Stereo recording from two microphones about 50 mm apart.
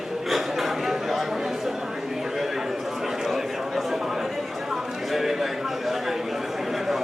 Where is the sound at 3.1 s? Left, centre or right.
Centre.